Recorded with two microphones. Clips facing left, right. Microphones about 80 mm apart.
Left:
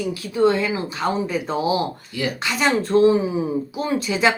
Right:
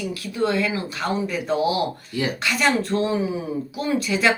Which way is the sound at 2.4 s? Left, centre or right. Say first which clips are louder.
Left 1 dB; left.